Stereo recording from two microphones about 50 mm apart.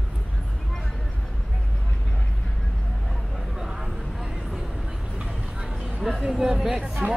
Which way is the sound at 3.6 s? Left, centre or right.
Centre.